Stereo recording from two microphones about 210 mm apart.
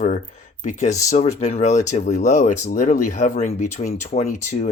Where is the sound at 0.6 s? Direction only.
35° left (ahead or behind).